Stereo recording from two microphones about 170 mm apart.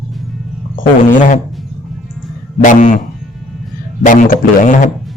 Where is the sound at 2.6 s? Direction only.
50° left (ahead or behind).